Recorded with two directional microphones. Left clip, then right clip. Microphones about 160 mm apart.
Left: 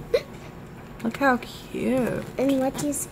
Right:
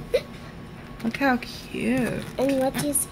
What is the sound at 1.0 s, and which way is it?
Speech, centre (ahead or behind).